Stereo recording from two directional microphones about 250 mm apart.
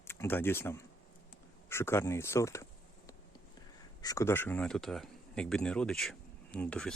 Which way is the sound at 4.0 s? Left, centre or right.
Centre.